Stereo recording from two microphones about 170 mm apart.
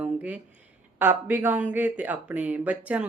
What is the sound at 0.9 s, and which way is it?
Speech, 10° right (ahead or behind).